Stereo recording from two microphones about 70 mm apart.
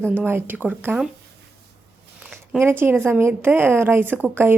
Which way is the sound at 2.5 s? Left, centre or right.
Right.